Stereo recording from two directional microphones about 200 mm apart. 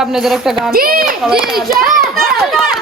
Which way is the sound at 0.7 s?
45° right (ahead or behind).